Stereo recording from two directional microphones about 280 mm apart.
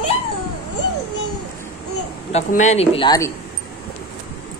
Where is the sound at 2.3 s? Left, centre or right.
Left.